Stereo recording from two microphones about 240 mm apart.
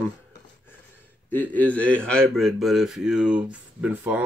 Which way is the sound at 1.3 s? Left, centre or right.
Centre.